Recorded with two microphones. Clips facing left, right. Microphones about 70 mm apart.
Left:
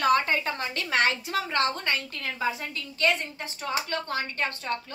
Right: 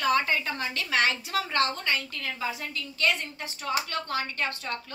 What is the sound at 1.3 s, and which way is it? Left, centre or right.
Speech, centre.